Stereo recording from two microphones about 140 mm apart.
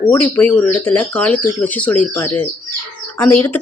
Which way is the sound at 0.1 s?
10° left (ahead or behind).